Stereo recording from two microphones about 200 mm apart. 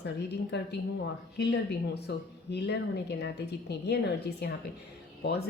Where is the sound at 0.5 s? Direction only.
60° left (ahead or behind).